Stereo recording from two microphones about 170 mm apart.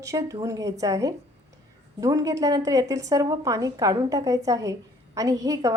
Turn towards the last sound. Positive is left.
turn(degrees=-20)  # may be behind; listen again after turning